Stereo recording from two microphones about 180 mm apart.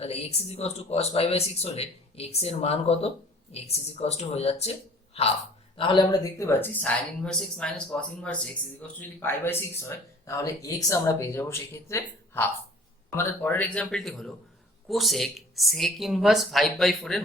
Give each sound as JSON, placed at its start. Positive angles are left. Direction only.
{"t": 0.0, "sound": "speech", "side_deg": 35}
{"t": 6.4, "sound": "speech", "side_deg": 10}